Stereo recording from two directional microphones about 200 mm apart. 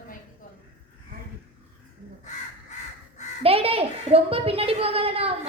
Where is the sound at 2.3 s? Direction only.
35° left (ahead or behind).